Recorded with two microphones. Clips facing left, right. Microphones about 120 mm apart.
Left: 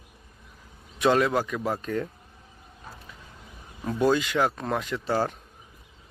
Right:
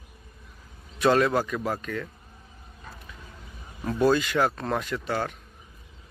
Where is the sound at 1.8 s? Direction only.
30° left (ahead or behind).